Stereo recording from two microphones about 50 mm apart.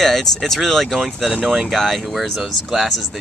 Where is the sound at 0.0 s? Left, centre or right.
Centre.